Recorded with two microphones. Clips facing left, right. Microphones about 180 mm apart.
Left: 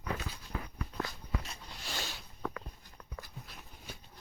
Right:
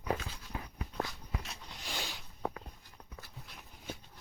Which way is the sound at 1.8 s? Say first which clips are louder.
Even; 15° right (ahead or behind).